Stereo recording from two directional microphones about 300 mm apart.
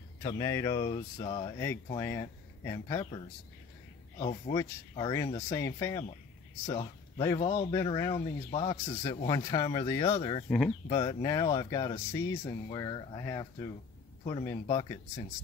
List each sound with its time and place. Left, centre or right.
0.2 s speech: centre
4.2 s speech: centre